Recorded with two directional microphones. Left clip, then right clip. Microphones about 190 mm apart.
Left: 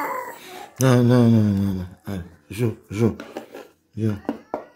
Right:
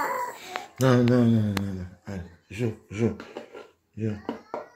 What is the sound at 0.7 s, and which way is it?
Speech, 20° left (ahead or behind).